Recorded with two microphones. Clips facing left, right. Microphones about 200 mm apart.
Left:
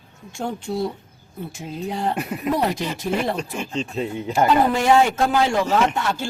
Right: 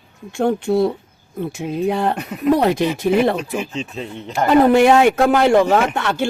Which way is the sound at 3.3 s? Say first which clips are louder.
Right 3 dB; 5° right (ahead or behind).